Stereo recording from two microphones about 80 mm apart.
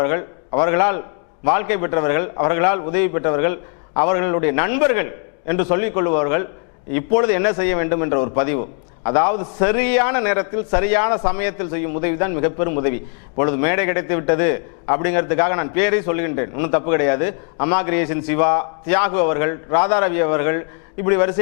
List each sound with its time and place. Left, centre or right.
0.0 s a man's voice: left